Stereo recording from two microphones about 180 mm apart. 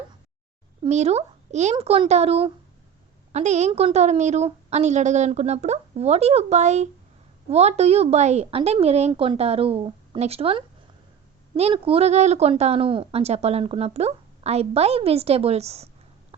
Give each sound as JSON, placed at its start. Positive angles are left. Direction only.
{"t": 0.8, "sound": "a child's voice", "side_deg": -40}